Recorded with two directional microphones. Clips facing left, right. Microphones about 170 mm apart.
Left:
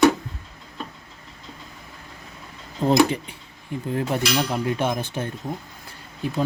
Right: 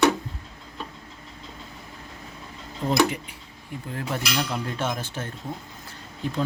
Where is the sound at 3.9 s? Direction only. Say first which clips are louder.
Left 6 dB; 20° left (ahead or behind).